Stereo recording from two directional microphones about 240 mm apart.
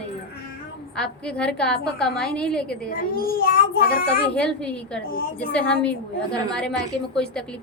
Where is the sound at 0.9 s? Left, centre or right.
Centre.